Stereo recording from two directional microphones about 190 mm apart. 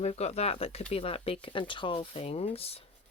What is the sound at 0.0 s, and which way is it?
Speech, 35° left (ahead or behind).